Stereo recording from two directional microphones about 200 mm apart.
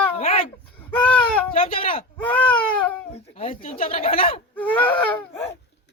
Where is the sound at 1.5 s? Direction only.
30° left (ahead or behind).